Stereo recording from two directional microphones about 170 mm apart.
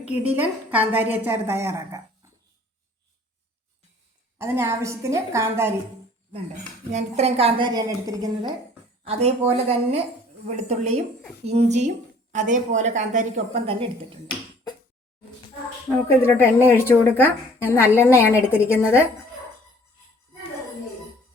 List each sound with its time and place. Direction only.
0.3 s a woman's voice: 10° right (ahead or behind)
4.4 s a woman's voice: 15° right (ahead or behind)
6.9 s a woman's voice: 40° right (ahead or behind)
7.7 s a woman's voice: 20° right (ahead or behind)
9.0 s a woman's voice: 40° right (ahead or behind)
16.2 s a woman's voice: 15° left (ahead or behind)